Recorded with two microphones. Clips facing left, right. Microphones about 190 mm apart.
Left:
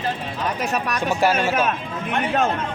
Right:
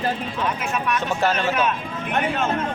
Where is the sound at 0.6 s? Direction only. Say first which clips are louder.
Left 1 dB; 40° left (ahead or behind).